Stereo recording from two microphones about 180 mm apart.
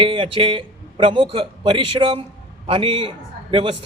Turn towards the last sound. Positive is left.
turn(degrees=-25)  # may be behind; listen again after turning